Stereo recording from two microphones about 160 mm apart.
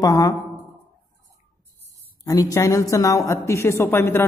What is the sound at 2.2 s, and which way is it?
A man's voice, 20° left (ahead or behind).